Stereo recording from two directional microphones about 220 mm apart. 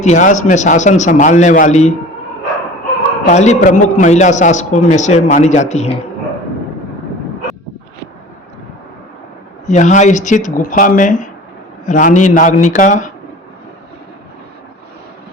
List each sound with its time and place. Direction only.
0.0 s a man's voice: 35° left (ahead or behind)
3.2 s a man's voice: 30° left (ahead or behind)
9.6 s a man's voice: 35° left (ahead or behind)